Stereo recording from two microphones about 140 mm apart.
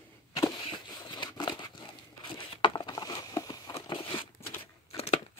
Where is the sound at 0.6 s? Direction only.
35° left (ahead or behind).